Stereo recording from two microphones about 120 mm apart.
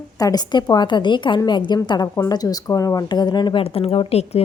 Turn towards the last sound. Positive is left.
turn(degrees=55)  # may be behind; listen again after turning